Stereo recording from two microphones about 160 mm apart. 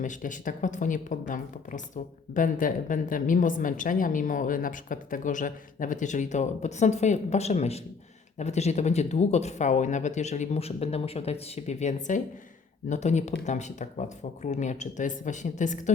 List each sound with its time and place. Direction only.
0.0 s a woman's voice: 55° left (ahead or behind)